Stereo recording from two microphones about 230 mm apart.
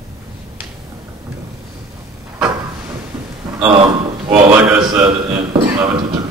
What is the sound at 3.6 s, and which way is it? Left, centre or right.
Speech, right.